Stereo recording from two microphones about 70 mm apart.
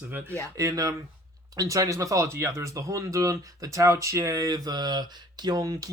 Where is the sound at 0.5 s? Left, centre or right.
Right.